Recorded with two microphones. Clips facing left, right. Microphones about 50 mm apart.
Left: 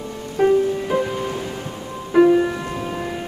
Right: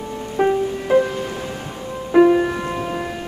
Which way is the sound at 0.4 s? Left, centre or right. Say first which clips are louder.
Left 2 dB; centre.